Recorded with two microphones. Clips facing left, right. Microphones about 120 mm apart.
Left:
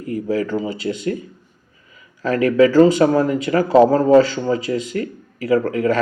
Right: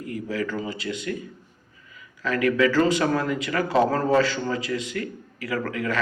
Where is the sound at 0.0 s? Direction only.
35° left (ahead or behind).